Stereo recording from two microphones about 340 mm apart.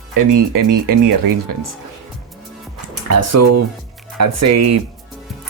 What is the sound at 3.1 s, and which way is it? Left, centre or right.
Speech, right.